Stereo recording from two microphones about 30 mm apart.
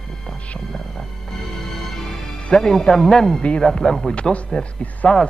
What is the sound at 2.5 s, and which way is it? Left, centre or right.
Speech, left.